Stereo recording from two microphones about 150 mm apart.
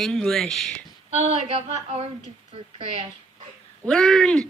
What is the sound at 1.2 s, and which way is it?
A woman's voice, 40° right (ahead or behind).